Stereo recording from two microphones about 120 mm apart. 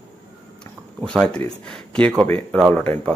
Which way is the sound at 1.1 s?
5° left (ahead or behind).